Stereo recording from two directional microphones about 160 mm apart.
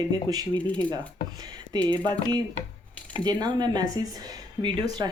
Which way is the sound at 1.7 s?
25° right (ahead or behind).